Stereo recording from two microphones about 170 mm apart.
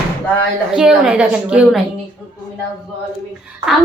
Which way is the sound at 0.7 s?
5° right (ahead or behind).